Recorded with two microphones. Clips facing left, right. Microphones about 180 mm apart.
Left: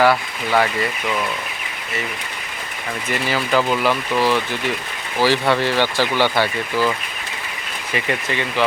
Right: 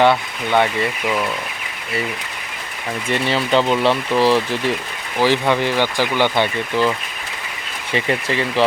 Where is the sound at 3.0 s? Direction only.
30° right (ahead or behind).